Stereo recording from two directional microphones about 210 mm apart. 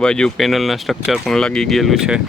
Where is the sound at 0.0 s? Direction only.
5° left (ahead or behind).